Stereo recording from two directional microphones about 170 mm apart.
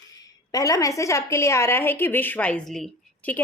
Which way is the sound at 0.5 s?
20° left (ahead or behind).